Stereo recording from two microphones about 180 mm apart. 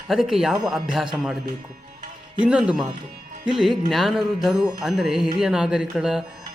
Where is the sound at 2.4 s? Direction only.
5° right (ahead or behind).